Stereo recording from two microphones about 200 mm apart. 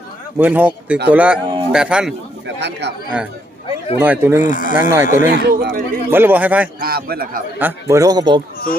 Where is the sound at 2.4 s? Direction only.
60° right (ahead or behind).